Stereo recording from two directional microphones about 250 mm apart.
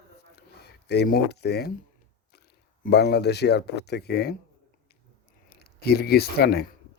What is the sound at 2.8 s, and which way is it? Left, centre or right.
Speech, left.